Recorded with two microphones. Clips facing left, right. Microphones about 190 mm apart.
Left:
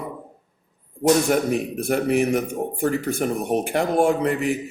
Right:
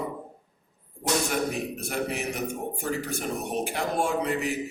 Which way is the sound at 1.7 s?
55° left (ahead or behind).